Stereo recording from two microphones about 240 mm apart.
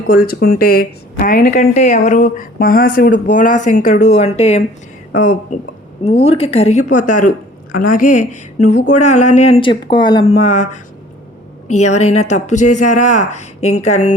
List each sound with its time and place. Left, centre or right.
0.1 s speech: left